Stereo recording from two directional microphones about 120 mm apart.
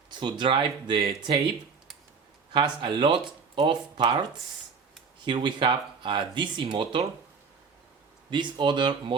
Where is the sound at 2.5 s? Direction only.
40° right (ahead or behind).